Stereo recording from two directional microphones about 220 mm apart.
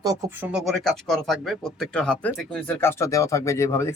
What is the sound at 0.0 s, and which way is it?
Speech, 15° right (ahead or behind).